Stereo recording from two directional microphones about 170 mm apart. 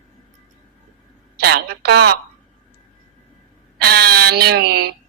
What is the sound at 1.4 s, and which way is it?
Speech, 70° right (ahead or behind).